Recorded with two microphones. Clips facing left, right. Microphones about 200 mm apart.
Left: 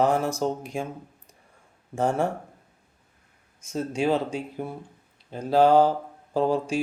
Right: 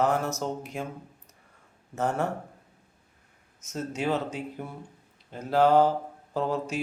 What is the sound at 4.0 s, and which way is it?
Speech, 15° left (ahead or behind).